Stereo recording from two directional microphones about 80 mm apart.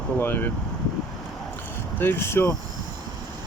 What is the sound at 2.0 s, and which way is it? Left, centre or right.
Speech, left.